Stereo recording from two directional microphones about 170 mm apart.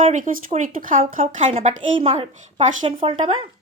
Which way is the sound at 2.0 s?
35° right (ahead or behind).